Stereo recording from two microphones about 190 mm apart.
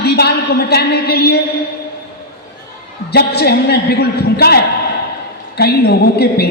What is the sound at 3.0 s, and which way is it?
A woman's voice, 60° left (ahead or behind).